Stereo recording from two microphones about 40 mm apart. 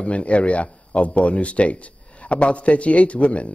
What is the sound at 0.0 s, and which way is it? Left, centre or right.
Speech, left.